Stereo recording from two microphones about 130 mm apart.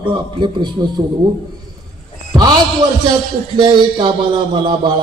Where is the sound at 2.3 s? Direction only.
30° right (ahead or behind).